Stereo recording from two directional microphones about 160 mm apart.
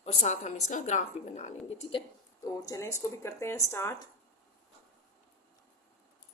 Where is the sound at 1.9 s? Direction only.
30° left (ahead or behind).